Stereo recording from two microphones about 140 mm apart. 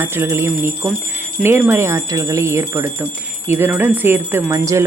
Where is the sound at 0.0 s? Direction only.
15° right (ahead or behind).